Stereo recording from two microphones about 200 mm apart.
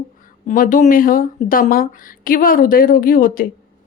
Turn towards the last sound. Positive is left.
turn(degrees=45)  # may be behind; listen again after turning